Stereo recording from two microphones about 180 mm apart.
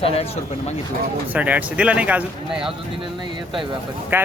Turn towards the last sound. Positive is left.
turn(degrees=-10)  # may be behind; listen again after turning